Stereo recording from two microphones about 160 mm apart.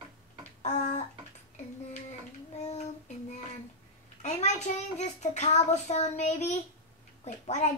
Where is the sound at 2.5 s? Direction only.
45° left (ahead or behind).